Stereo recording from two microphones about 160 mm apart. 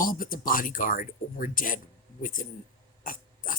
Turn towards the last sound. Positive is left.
turn(degrees=60)  # may be behind; listen again after turning